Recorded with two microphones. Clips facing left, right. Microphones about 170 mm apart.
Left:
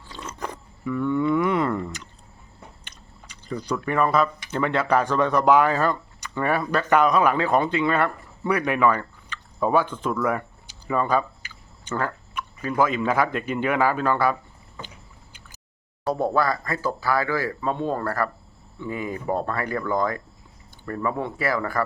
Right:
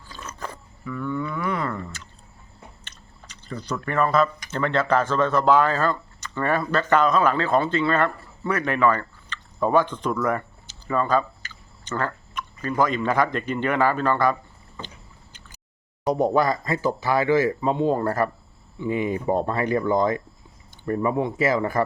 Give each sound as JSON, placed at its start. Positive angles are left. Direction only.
{"t": 0.1, "sound": "roaring cats", "side_deg": 20}
{"t": 2.8, "sound": "chewing", "side_deg": 10}
{"t": 4.5, "sound": "speech", "side_deg": 10}
{"t": 16.0, "sound": "speech", "side_deg": -20}